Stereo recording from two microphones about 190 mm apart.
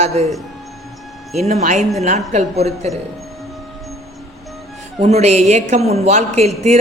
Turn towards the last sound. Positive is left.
turn(degrees=-35)  # may be behind; listen again after turning